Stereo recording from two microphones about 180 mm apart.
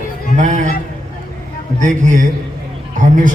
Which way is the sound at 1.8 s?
45° right (ahead or behind).